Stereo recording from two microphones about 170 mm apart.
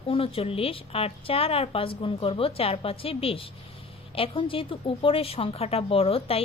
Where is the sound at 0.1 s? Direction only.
35° left (ahead or behind).